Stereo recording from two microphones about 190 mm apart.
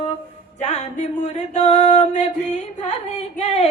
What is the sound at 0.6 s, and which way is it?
Music, 35° left (ahead or behind).